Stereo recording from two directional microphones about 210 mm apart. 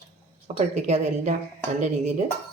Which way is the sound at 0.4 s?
30° right (ahead or behind).